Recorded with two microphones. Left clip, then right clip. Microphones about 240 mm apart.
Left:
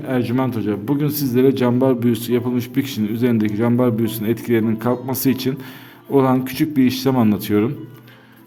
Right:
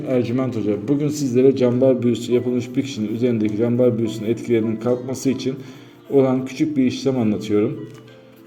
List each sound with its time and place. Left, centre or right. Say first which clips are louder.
0.1 s a man's voice: even; left